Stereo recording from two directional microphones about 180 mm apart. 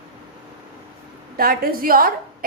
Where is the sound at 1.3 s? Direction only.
55° right (ahead or behind).